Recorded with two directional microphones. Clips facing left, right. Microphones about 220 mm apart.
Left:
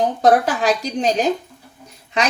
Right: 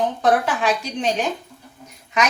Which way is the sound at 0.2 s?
40° left (ahead or behind).